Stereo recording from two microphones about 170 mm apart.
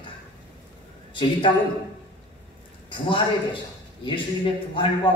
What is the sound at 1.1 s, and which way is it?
Speech, 30° left (ahead or behind).